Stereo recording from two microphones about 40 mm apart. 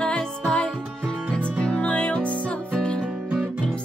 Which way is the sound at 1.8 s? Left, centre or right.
Left.